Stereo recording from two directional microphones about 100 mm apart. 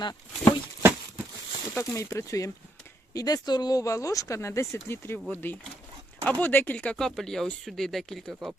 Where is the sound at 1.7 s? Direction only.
25° left (ahead or behind).